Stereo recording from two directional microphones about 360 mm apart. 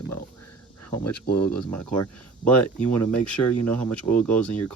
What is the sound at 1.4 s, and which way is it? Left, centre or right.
Speech, centre.